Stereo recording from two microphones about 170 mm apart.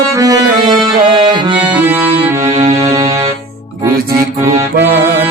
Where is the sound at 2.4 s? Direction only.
40° right (ahead or behind).